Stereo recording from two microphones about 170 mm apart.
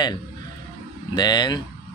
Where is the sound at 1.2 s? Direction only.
25° left (ahead or behind).